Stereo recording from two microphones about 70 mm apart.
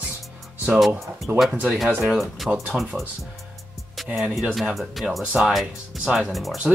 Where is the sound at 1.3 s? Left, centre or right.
Right.